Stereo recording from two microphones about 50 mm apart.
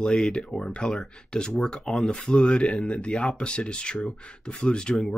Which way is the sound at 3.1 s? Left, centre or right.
Centre.